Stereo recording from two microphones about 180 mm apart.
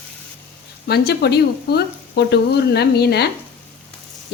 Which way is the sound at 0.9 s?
65° left (ahead or behind).